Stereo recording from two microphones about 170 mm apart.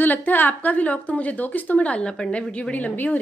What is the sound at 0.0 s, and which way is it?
A woman's voice, 10° left (ahead or behind).